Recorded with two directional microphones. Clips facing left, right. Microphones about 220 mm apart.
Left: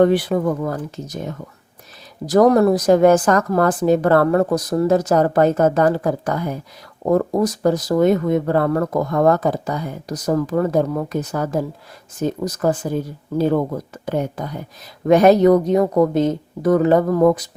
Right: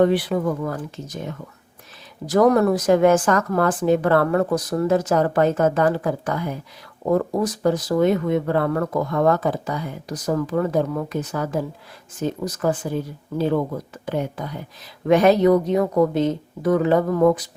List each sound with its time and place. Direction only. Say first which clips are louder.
0.0 s a woman's voice: left 3 dB; 45° left (ahead or behind)
14.0 s a woman's voice: left 3 dB; 45° left (ahead or behind)